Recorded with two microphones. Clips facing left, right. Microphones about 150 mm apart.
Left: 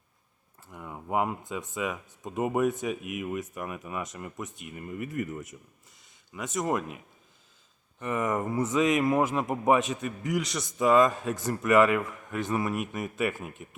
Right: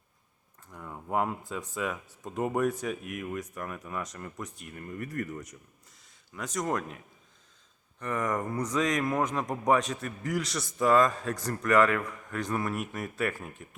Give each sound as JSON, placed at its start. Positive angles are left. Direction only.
{"t": 0.7, "sound": "a man's voice", "side_deg": 5}
{"t": 8.0, "sound": "a man's voice", "side_deg": 5}